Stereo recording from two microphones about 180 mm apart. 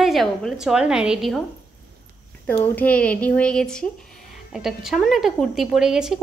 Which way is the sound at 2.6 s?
10° left (ahead or behind).